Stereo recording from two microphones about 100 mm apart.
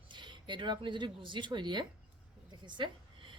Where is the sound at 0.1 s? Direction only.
50° right (ahead or behind).